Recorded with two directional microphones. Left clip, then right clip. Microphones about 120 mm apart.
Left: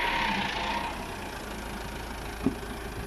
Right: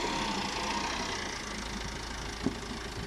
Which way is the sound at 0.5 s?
Centre (ahead or behind).